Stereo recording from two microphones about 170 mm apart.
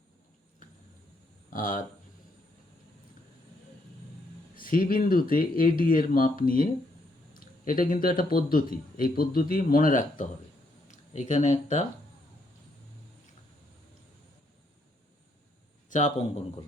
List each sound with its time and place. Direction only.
4.5 s speech: 55° left (ahead or behind)
15.9 s a man's voice: 45° left (ahead or behind)